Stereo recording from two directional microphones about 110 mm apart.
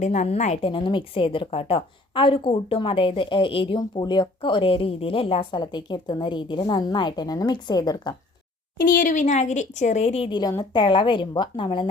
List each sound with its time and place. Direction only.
0.0 s a woman's voice: 90° left
0.7 s a woman's voice: 50° left (ahead or behind)
4.0 s a woman's voice: 45° left (ahead or behind)
9.1 s a woman's voice: 90° left; by 10.3 s 65° left (ahead or behind)
10.6 s a woman's voice: 45° left (ahead or behind)